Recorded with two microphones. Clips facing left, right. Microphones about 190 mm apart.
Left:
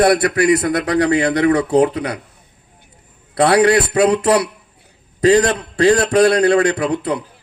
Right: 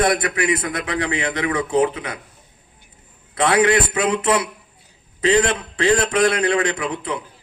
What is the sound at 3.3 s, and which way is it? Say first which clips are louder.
A man's voice: left 4 dB; 40° left (ahead or behind).